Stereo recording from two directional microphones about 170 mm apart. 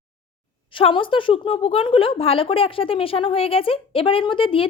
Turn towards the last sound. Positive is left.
turn(degrees=30)  # may be behind; listen again after turning